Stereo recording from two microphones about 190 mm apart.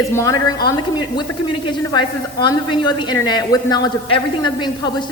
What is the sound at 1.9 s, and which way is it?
A man's voice, 25° left (ahead or behind).